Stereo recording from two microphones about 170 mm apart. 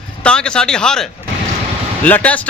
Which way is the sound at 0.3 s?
5° left (ahead or behind).